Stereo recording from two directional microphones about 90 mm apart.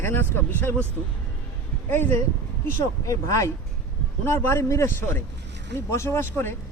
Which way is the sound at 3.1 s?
40° left (ahead or behind).